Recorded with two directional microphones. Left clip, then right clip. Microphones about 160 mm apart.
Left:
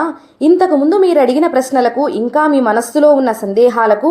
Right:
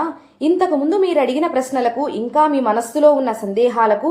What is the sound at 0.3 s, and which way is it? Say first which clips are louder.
A woman's voice: left 6 dB; 35° left (ahead or behind).